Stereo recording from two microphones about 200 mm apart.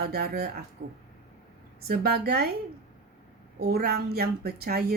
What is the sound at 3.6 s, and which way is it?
A woman's voice, 50° right (ahead or behind).